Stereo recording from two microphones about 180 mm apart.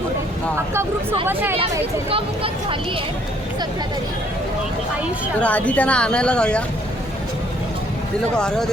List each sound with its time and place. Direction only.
1.3 s speech: 10° right (ahead or behind)
2.0 s speech: 30° right (ahead or behind)
5.4 s speech: 10° left (ahead or behind)
8.4 s speech: 5° left (ahead or behind)